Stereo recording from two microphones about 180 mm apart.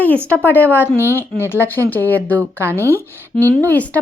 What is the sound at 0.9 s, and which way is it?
Speech, 15° right (ahead or behind).